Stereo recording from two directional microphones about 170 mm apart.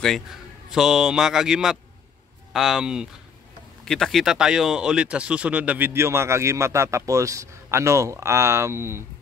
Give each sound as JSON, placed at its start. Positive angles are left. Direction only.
{"t": 0.0, "sound": "a man's voice", "side_deg": 0}